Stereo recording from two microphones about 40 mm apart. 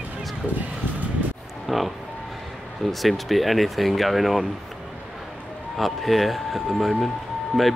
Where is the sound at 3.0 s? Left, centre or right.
Centre.